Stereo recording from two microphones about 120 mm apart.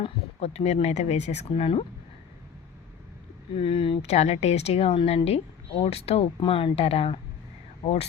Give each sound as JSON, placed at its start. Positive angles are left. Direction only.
{"t": 0.0, "sound": "speech", "side_deg": 60}
{"t": 3.6, "sound": "speech", "side_deg": 50}